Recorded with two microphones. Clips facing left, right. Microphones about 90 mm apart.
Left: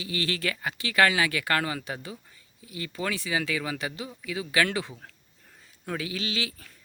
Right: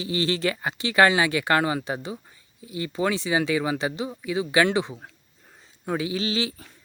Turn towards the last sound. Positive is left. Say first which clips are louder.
# right 6 dB
turn(degrees=-30)  # may be behind; listen again after turning